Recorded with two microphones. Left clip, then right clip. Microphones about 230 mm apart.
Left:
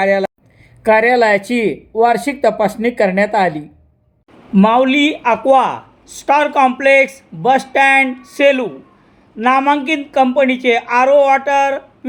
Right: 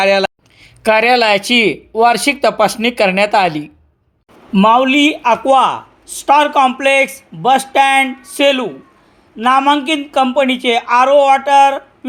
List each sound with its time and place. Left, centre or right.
0.0 s speech: centre